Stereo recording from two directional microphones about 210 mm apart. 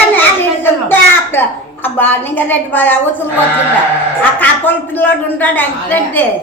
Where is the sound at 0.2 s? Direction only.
10° left (ahead or behind).